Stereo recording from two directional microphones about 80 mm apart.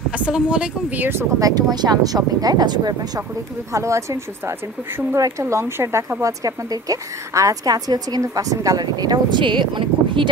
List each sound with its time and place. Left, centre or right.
0.1 s speech: centre
1.4 s a woman's voice: right
3.7 s speech: right
6.2 s a woman's voice: right